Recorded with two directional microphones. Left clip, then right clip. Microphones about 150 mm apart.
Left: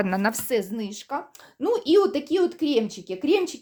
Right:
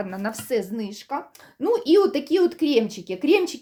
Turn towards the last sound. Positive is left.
turn(degrees=0)  # may be behind; listen again after turning